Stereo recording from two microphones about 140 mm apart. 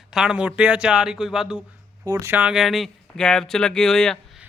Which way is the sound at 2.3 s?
5° right (ahead or behind).